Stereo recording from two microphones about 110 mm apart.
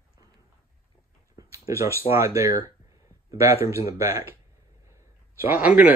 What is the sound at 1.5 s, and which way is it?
A man's voice, 25° right (ahead or behind).